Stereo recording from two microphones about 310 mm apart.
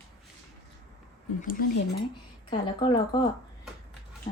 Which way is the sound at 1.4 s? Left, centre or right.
Left.